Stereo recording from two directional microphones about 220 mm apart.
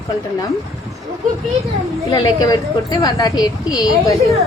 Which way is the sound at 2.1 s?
20° left (ahead or behind).